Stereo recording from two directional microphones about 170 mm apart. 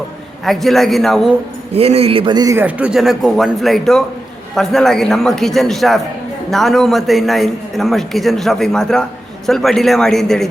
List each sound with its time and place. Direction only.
0.4 s a man's voice: centre (ahead or behind)
1.7 s a man's voice: 35° right (ahead or behind); by 2.6 s 20° right (ahead or behind)
2.6 s a man's voice: 10° right (ahead or behind)